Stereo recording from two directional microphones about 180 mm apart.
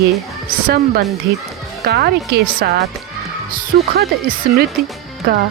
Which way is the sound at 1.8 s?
60° right (ahead or behind).